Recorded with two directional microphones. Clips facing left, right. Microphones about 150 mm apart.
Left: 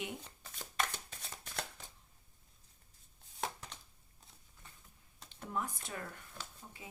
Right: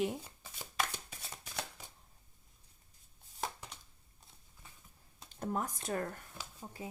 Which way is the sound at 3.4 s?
10° right (ahead or behind).